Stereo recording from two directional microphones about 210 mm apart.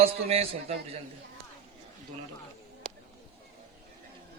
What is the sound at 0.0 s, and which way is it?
Mantra, 30° right (ahead or behind).